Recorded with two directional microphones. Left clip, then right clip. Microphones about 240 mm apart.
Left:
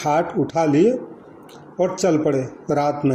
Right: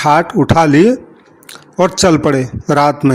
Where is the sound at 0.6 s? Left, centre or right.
Right.